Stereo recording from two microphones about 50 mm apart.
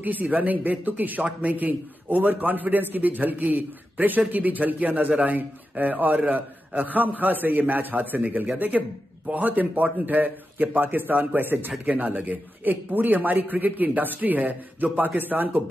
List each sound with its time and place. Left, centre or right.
0.0 s a man's voice: right